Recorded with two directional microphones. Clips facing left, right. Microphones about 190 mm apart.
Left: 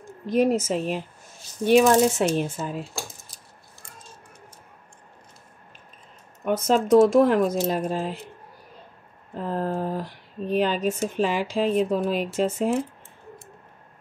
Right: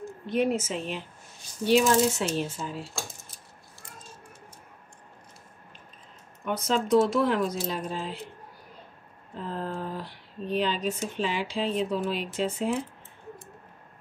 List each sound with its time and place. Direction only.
0.3 s a woman's voice: 40° left (ahead or behind)
1.7 s speech: 55° left (ahead or behind)
6.4 s speech: 45° left (ahead or behind)
9.3 s speech: 45° left (ahead or behind)